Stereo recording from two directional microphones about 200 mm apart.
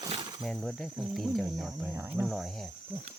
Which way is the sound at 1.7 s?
10° right (ahead or behind).